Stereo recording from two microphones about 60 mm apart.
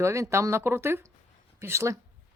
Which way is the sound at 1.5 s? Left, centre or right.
Right.